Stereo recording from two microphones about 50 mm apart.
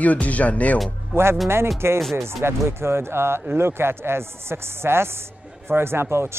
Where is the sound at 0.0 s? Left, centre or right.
Left.